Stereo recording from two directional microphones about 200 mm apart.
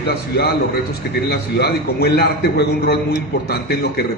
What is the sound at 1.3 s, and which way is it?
A man's voice, 55° left (ahead or behind).